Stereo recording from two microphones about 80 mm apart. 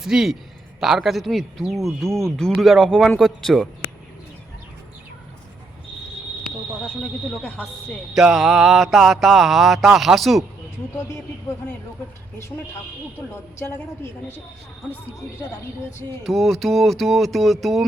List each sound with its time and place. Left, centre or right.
0.0 s a man's voice: centre
7.4 s speech: centre
8.1 s a man's voice: centre
10.9 s a woman's voice: left
13.1 s a woman's voice: left
16.2 s a man's voice: centre